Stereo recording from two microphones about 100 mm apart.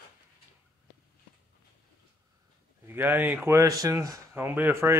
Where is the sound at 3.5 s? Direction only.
35° right (ahead or behind).